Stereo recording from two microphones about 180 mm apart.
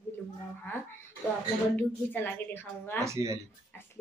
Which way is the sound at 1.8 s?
10° left (ahead or behind).